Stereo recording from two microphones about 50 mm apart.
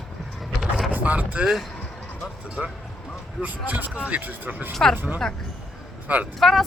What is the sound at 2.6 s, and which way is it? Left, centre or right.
A man's voice, right.